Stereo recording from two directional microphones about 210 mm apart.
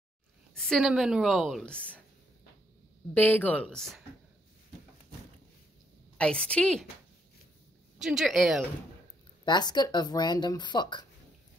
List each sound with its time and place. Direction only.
0.6 s a woman's voice: centre (ahead or behind)
3.2 s a woman's voice: 10° left (ahead or behind)
6.1 s a woman's voice: 5° left (ahead or behind)
8.0 s a woman's voice: centre (ahead or behind)
9.4 s speech: 20° left (ahead or behind)